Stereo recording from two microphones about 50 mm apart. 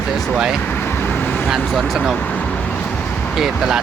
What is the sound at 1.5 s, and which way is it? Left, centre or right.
Speech, centre.